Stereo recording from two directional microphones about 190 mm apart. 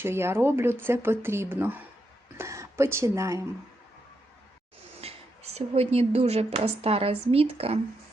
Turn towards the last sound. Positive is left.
turn(degrees=-30)  # may be behind; listen again after turning